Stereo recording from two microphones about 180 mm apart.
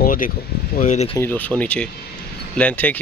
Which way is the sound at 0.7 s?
40° left (ahead or behind).